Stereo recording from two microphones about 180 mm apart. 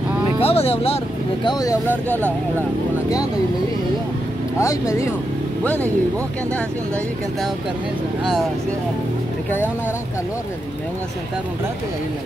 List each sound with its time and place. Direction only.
0.4 s speech: 30° left (ahead or behind)
1.4 s speech: 20° left (ahead or behind)
4.6 s speech: 15° left (ahead or behind)